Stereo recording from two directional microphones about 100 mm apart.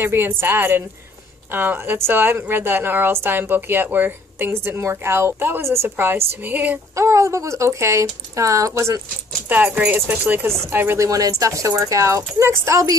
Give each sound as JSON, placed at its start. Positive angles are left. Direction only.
{"t": 0.0, "sound": "a woman's voice", "side_deg": -20}
{"t": 6.4, "sound": "a sound", "side_deg": -15}
{"t": 7.0, "sound": "a woman's voice", "side_deg": -30}
{"t": 9.5, "sound": "a woman's voice", "side_deg": -20}
{"t": 11.1, "sound": "speech", "side_deg": -35}